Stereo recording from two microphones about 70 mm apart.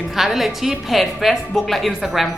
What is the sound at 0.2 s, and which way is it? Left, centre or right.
Speech, centre.